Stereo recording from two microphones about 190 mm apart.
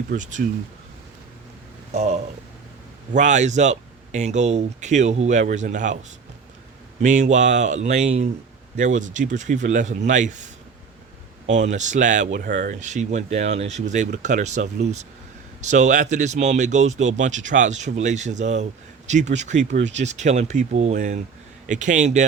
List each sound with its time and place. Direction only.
0.1 s speech: 40° right (ahead or behind)
1.9 s speech: 35° right (ahead or behind)
7.0 s speech: 40° right (ahead or behind)